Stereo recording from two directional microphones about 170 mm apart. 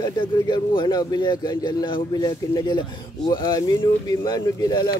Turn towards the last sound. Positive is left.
turn(degrees=25)  # may be behind; listen again after turning